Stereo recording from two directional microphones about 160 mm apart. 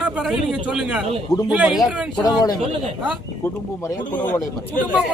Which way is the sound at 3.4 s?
20° left (ahead or behind).